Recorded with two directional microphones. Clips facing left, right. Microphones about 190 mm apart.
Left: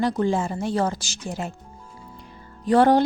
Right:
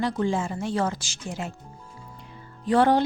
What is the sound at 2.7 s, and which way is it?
Speech, 40° left (ahead or behind).